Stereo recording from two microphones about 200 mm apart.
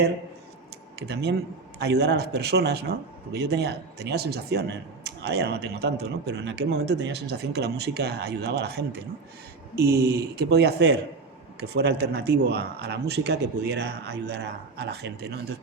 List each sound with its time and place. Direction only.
0.9 s speech: 55° right (ahead or behind)